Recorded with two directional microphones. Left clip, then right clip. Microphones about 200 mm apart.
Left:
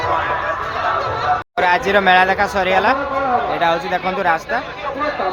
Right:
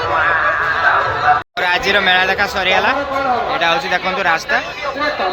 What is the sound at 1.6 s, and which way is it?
Speech, 15° left (ahead or behind).